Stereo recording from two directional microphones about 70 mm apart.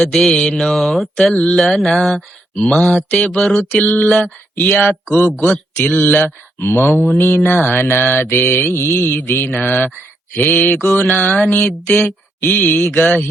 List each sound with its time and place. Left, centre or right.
0.3 s mantra: centre
4.7 s mantra: left